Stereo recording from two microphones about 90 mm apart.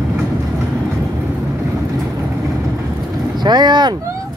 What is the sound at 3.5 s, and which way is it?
Vehicle, 55° right (ahead or behind).